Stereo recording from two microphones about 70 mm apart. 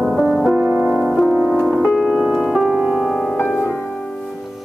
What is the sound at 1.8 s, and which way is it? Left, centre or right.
Piano, centre.